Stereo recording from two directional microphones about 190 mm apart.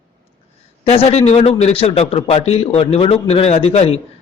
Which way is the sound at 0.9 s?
35° left (ahead or behind).